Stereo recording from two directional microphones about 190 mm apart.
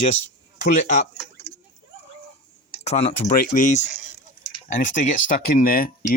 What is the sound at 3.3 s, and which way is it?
Speech, 45° left (ahead or behind).